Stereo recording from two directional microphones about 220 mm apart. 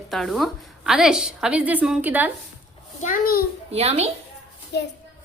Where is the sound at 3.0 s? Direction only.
40° left (ahead or behind).